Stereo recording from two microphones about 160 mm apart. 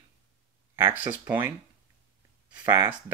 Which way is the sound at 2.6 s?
15° right (ahead or behind).